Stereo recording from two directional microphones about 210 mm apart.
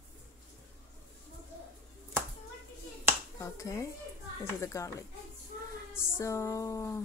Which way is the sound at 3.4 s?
15° left (ahead or behind).